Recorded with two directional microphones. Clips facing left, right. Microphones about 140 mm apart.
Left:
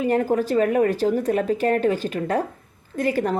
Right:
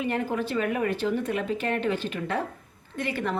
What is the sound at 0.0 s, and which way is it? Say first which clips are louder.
Speech: left 7 dB; 40° left (ahead or behind).